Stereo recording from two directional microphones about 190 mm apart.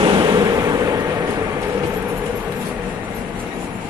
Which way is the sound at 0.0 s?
25° right (ahead or behind).